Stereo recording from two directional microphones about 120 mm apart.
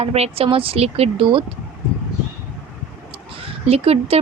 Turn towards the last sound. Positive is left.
turn(degrees=-55)  # may be behind; listen again after turning